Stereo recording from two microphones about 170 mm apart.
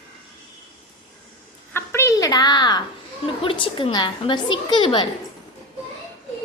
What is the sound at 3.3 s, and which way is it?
A woman's voice, 30° left (ahead or behind).